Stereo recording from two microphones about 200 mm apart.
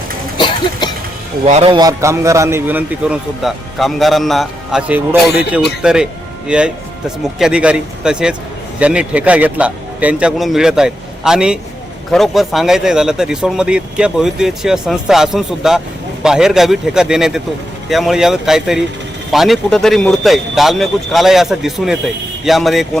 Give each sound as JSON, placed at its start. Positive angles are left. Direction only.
{"t": 0.3, "sound": "cough", "side_deg": 25}
{"t": 1.5, "sound": "a man's voice", "side_deg": -30}